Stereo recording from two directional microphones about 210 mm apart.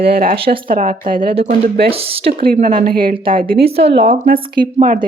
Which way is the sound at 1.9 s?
25° right (ahead or behind).